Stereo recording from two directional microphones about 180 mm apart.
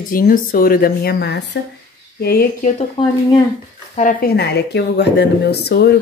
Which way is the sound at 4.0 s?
50° left (ahead or behind).